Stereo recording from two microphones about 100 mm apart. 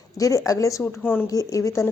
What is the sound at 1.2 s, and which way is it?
Speech, 35° left (ahead or behind).